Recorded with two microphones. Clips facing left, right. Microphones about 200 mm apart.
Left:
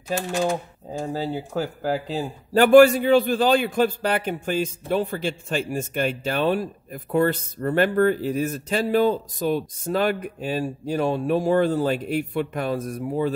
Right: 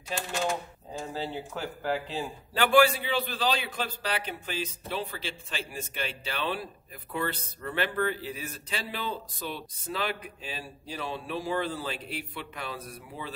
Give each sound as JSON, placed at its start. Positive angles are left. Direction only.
{"t": 1.0, "sound": "a man's voice", "side_deg": 40}